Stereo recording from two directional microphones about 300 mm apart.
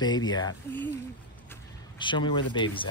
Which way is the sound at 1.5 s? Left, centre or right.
Centre.